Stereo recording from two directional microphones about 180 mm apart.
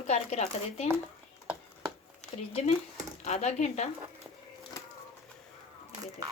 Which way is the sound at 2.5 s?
35° left (ahead or behind).